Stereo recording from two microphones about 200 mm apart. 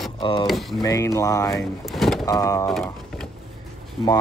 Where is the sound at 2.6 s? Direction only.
Centre (ahead or behind).